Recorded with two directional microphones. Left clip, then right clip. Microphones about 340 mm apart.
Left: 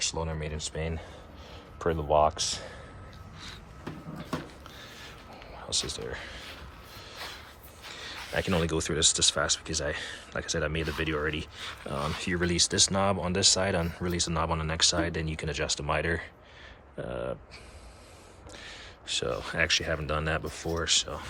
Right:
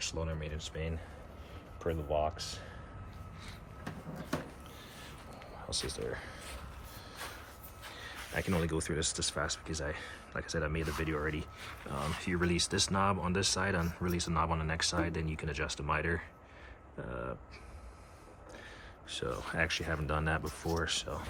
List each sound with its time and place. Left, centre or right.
0.0 s speech: centre
5.6 s speech: centre
7.9 s speech: centre
18.5 s speech: centre